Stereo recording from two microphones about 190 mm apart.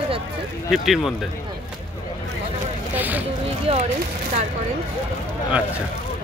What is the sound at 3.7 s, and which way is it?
Speech, 30° right (ahead or behind).